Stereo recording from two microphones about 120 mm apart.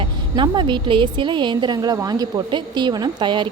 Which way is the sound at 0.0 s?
40° right (ahead or behind).